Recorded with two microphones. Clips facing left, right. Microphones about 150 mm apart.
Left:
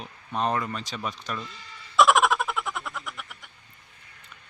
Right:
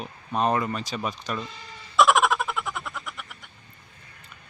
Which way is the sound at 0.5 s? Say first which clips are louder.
Right 3 dB; 10° right (ahead or behind).